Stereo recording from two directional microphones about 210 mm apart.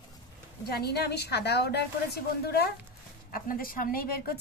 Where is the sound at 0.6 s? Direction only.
50° left (ahead or behind).